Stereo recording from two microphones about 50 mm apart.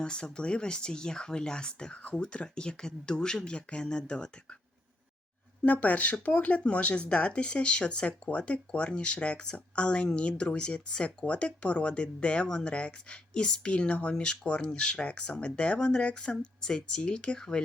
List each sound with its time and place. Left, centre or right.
0.0 s speech: centre
5.6 s speech: left; by 17.6 s centre